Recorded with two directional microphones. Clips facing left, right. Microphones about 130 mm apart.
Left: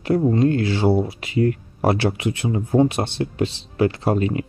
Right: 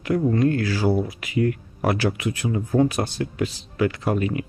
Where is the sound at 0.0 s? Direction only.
30° left (ahead or behind).